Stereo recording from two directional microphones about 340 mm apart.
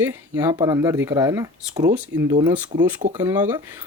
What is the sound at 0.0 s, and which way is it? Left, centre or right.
Speech, centre.